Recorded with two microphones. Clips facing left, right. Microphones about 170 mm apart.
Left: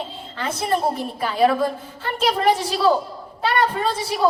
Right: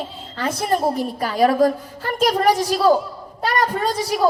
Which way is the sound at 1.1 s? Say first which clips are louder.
Right 2 dB; 40° right (ahead or behind).